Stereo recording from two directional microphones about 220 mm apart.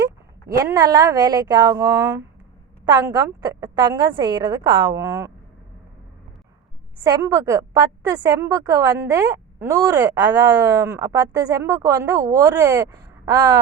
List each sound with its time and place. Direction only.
0.4 s a woman's voice: 15° right (ahead or behind)
7.0 s a woman's voice: 15° right (ahead or behind)